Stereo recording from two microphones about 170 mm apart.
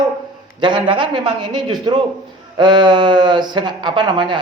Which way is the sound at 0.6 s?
30° right (ahead or behind).